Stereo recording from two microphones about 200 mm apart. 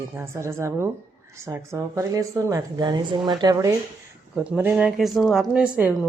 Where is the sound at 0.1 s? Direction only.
15° right (ahead or behind).